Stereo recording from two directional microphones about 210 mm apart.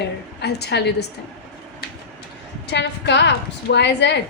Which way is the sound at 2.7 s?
55° left (ahead or behind).